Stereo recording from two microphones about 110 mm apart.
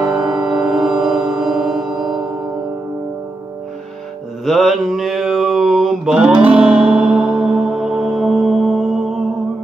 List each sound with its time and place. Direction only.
0.0 s music: 40° right (ahead or behind)
0.5 s music: 5° right (ahead or behind)
4.5 s mantra: centre (ahead or behind)